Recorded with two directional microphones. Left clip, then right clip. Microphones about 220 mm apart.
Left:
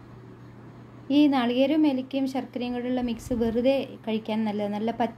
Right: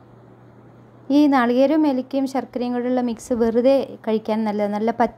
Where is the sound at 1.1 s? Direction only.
30° right (ahead or behind).